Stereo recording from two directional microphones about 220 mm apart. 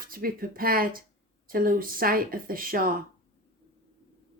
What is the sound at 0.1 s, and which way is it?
Speech, 40° right (ahead or behind).